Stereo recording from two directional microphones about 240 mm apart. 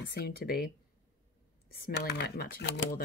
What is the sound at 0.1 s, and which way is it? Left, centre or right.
Speech, left.